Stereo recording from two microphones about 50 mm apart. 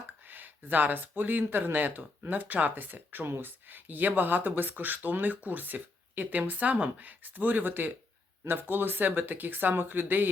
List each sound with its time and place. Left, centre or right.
0.3 s speech: right